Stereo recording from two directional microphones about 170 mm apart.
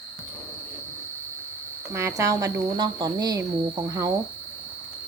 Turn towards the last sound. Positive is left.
turn(degrees=-20)  # may be behind; listen again after turning